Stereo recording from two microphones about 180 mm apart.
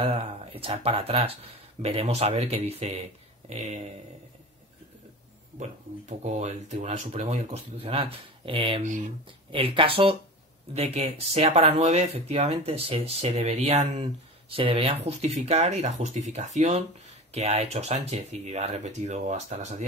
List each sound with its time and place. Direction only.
0.0 s speech: 30° right (ahead or behind)
5.6 s speech: 40° right (ahead or behind)